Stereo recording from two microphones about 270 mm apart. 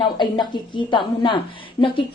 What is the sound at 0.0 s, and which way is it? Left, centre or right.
A woman's voice, centre.